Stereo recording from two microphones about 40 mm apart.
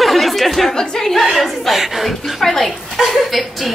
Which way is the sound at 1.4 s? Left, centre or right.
Centre.